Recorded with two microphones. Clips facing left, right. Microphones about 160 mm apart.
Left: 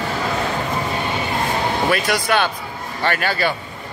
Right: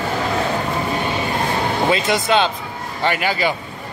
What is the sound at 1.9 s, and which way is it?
Speech, 20° right (ahead or behind).